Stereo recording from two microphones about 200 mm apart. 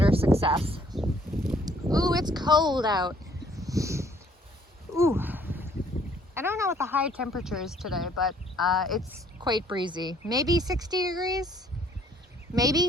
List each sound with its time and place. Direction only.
0.0 s a sound: 30° right (ahead or behind)
1.6 s speech: 20° right (ahead or behind)
3.6 s a sound: 15° right (ahead or behind)
6.3 s speech: 10° right (ahead or behind)
9.4 s speech: 20° right (ahead or behind)
12.5 s speech: 20° right (ahead or behind)